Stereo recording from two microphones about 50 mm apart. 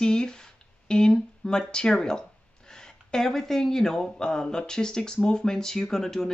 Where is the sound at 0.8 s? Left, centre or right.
Centre.